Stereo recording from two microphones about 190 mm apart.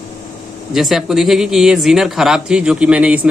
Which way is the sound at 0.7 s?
Centre (ahead or behind).